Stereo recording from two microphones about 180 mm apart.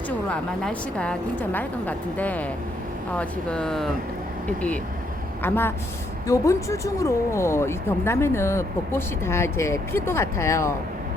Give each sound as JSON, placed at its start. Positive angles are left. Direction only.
{"t": 0.3, "sound": "speech", "side_deg": 5}
{"t": 5.4, "sound": "a woman's voice", "side_deg": 10}